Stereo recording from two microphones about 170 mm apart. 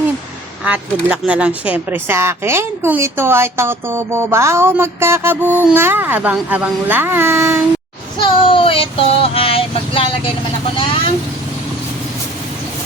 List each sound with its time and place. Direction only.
0.6 s speech: 5° right (ahead or behind)
8.2 s child singing: 30° left (ahead or behind)